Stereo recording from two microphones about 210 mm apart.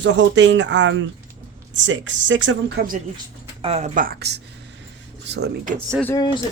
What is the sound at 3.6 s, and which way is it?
Speech, 30° right (ahead or behind).